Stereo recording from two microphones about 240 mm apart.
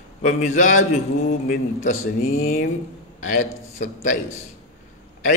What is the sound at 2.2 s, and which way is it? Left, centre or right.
A man's voice, left.